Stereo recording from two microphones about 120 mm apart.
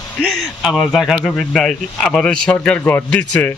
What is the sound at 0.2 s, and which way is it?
Speech, 5° right (ahead or behind).